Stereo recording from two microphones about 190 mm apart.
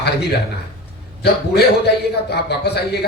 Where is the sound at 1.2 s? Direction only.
60° left (ahead or behind).